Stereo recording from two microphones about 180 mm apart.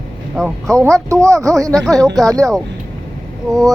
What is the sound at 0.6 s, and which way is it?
Speech, 15° right (ahead or behind).